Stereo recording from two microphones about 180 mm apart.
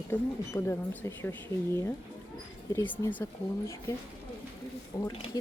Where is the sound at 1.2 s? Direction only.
15° left (ahead or behind).